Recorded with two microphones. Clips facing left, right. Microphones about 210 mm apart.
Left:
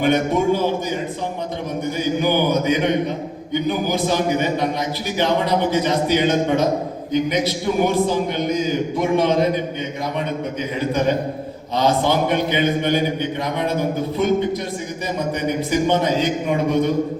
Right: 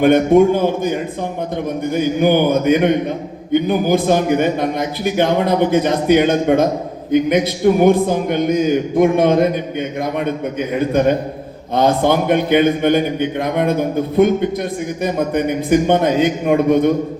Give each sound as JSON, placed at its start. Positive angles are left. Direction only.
{"t": 0.0, "sound": "a man's voice", "side_deg": -55}
{"t": 11.7, "sound": "a man's voice", "side_deg": -55}